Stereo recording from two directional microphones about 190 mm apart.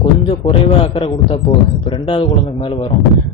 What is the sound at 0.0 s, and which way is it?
A man's voice, 25° left (ahead or behind).